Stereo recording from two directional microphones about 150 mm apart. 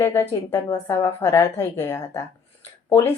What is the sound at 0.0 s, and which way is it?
A woman's voice, 15° left (ahead or behind).